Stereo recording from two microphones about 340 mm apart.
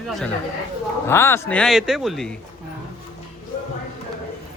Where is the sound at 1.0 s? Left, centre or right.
Centre.